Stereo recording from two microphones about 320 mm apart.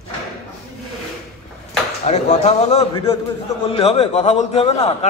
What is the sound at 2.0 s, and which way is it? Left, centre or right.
A man's voice, left.